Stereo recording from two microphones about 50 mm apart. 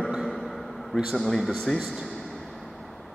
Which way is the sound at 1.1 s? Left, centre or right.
Centre.